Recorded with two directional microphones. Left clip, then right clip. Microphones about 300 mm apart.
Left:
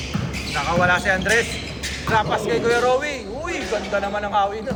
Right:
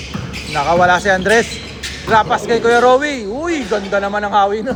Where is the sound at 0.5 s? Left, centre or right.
Centre.